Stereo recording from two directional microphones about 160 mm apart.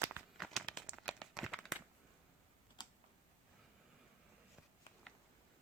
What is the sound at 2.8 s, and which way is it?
Typing, 30° left (ahead or behind).